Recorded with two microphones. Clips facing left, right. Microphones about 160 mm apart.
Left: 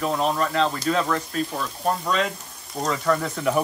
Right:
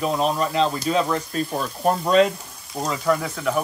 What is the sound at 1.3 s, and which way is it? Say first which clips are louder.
Speech: right 2 dB; 35° right (ahead or behind).